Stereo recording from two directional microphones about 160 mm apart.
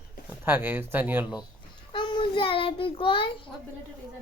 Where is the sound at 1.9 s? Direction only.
30° left (ahead or behind).